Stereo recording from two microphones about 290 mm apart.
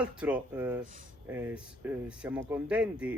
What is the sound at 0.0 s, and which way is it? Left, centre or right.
Speech, centre.